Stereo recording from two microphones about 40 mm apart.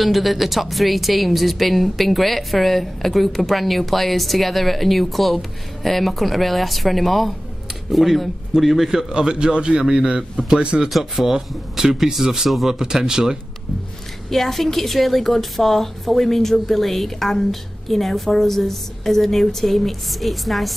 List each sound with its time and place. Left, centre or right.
0.0 s speech: centre
9.1 s a man's voice: right
10.9 s speech: centre
14.3 s speech: centre